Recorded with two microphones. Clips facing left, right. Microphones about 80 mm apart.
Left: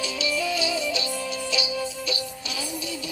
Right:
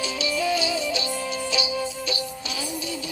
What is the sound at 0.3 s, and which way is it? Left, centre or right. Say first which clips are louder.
Music: right 2 dB; right.